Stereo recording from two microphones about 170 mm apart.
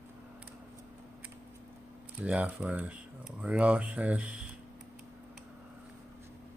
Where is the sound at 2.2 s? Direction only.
5° right (ahead or behind).